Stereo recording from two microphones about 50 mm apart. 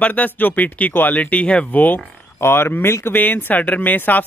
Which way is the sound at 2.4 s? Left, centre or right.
Left.